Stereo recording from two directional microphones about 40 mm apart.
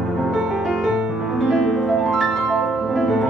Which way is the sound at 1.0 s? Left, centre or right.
Centre.